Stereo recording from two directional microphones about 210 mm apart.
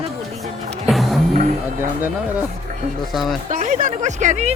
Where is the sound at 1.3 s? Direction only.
35° right (ahead or behind).